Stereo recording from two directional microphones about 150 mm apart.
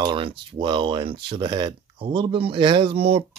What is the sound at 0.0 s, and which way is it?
Speech, 35° right (ahead or behind).